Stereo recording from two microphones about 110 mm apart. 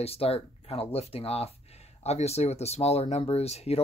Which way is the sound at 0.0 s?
65° left (ahead or behind).